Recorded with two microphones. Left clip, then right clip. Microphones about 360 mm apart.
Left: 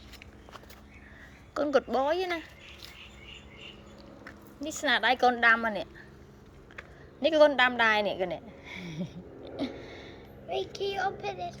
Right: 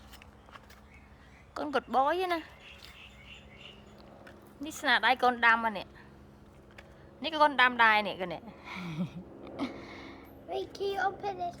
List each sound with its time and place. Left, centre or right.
1.5 s a woman's voice: centre
4.6 s a woman's voice: centre
7.2 s a woman's voice: centre
9.0 s a sound: right
9.6 s a sound: centre
10.5 s a woman's voice: centre